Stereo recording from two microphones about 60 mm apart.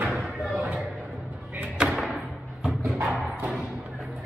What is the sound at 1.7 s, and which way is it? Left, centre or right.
Music, centre.